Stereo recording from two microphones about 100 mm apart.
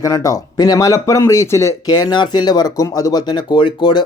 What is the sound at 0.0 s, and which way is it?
Speech, 35° left (ahead or behind).